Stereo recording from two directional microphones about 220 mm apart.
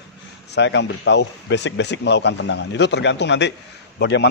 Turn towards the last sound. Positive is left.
turn(degrees=50)  # may be behind; listen again after turning